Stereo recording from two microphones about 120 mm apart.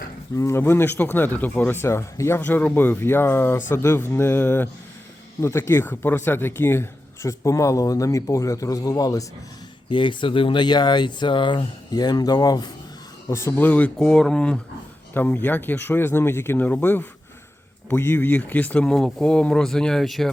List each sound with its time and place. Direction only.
0.3 s speech: 25° left (ahead or behind)
9.9 s speech: 40° left (ahead or behind); by 13.7 s 25° left (ahead or behind)
13.7 s speech: 10° left (ahead or behind)